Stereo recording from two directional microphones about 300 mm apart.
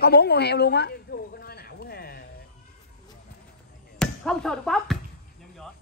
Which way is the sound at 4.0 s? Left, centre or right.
Centre.